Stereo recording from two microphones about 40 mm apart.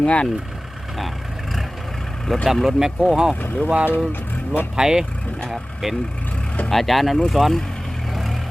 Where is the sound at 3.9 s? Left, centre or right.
Left.